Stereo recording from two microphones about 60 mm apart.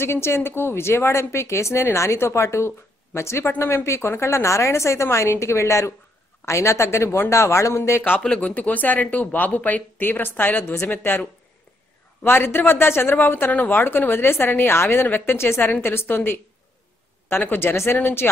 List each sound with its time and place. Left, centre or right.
0.0 s a woman's voice: left
8.4 s a woman's voice: left
18.2 s speech: left